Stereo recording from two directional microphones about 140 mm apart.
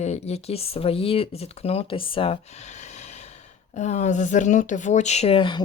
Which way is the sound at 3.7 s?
55° left (ahead or behind).